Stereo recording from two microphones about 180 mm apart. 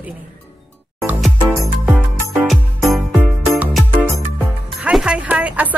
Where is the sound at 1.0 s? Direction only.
Centre (ahead or behind).